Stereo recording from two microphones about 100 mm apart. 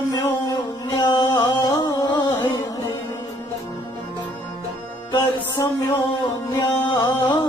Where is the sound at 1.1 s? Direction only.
45° left (ahead or behind).